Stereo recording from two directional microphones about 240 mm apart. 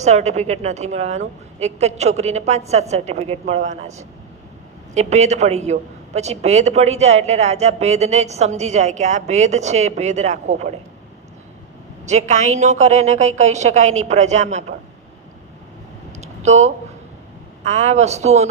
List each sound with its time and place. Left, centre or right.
0.0 s a man's voice: right
12.0 s a man's voice: right
16.2 s a sound: right
17.6 s a man's voice: right